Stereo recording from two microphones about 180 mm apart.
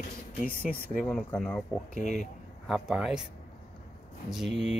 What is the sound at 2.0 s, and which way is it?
Speech, 45° left (ahead or behind).